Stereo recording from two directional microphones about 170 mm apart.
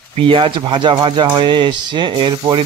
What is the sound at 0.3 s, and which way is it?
Speech, 30° right (ahead or behind).